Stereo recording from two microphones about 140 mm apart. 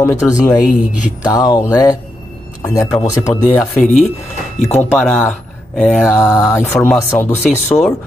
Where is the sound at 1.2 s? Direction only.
30° left (ahead or behind).